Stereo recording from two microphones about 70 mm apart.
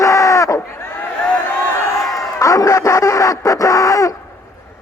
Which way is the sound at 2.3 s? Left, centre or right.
Left.